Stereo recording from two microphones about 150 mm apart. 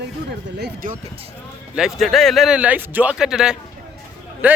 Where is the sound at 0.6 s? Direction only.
70° right (ahead or behind).